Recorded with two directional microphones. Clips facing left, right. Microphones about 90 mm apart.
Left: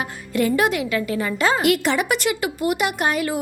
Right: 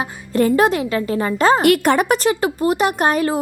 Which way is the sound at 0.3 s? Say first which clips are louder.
Right 4 dB; 35° right (ahead or behind).